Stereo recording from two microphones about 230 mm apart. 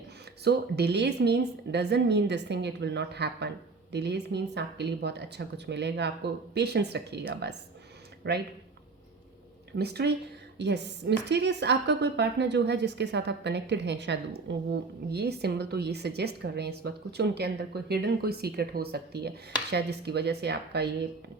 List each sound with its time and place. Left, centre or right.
0.4 s a woman's voice: right
9.7 s a woman's voice: right